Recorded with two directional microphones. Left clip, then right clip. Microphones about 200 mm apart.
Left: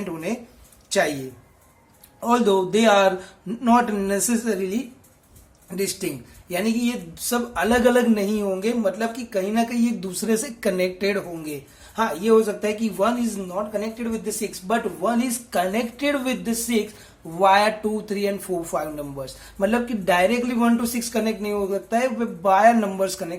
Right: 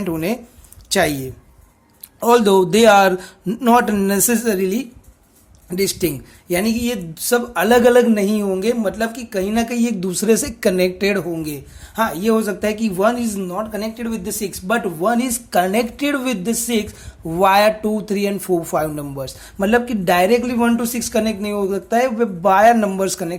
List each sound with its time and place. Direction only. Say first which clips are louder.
0.0 s speech: right 7 dB; 40° right (ahead or behind)
2.2 s speech: right 7 dB; 45° right (ahead or behind)